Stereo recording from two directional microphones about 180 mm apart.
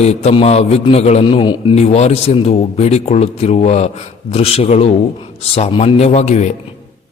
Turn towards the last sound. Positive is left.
turn(degrees=40)  # may be behind; listen again after turning